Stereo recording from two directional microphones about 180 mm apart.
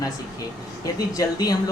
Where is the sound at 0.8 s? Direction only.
20° left (ahead or behind).